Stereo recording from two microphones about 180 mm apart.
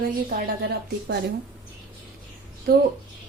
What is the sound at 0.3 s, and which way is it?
Speech, 65° right (ahead or behind).